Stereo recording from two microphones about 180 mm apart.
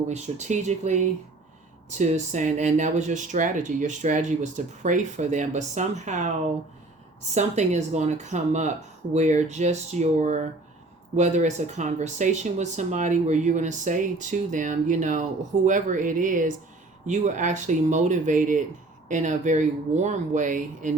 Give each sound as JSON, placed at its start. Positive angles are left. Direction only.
{"t": 0.1, "sound": "speech", "side_deg": -40}
{"t": 7.3, "sound": "speech", "side_deg": -40}